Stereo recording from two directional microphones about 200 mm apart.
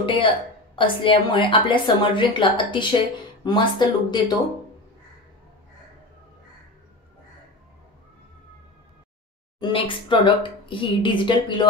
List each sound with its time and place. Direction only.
0.0 s a woman's voice: 25° left (ahead or behind)
9.6 s a woman's voice: 25° left (ahead or behind)